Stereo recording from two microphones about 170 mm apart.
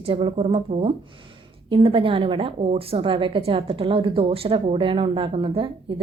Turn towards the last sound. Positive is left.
turn(degrees=-30)  # may be behind; listen again after turning